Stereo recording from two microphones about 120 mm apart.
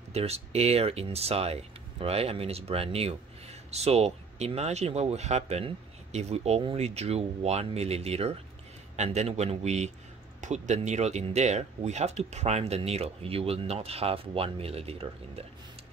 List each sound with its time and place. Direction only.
0.1 s speech: 60° right (ahead or behind)
8.9 s a man's voice: 70° right (ahead or behind)
10.4 s speech: 85° right; by 15.4 s 55° right (ahead or behind)